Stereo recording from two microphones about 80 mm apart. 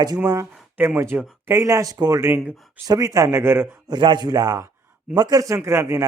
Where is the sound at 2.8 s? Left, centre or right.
Right.